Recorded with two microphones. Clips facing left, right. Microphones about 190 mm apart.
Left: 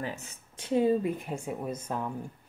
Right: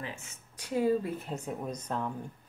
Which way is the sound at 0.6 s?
25° left (ahead or behind).